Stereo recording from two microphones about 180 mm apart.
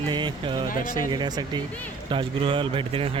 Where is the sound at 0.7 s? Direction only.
50° left (ahead or behind).